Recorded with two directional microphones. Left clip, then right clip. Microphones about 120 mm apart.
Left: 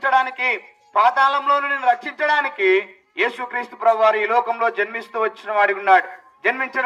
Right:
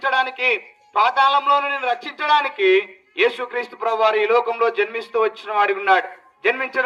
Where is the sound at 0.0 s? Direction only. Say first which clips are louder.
Left 1 dB; 45° left (ahead or behind).